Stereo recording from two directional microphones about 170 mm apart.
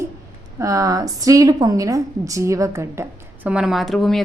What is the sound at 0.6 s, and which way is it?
Speech, 20° right (ahead or behind).